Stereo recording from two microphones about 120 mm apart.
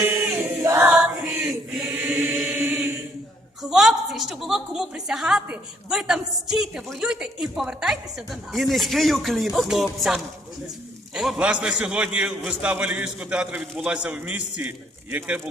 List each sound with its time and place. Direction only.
0.0 s choir: 20° right (ahead or behind)
0.9 s choir: 10° right (ahead or behind)
2.2 s chant: 5° right (ahead or behind)
3.6 s a woman's voice: 5° right (ahead or behind)